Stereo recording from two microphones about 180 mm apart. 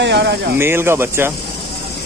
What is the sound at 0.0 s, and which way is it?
Speech, 70° right (ahead or behind).